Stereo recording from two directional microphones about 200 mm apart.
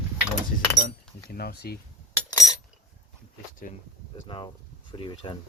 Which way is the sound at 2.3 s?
15° left (ahead or behind).